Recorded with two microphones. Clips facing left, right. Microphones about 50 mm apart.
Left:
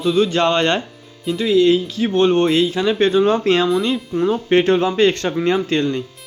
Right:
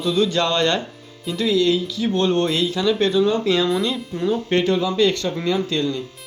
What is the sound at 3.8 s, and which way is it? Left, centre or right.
Speech, left.